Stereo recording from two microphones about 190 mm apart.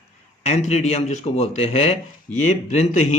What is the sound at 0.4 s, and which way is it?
Speech, 35° left (ahead or behind).